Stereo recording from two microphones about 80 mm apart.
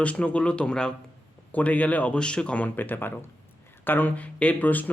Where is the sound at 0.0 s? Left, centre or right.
Centre.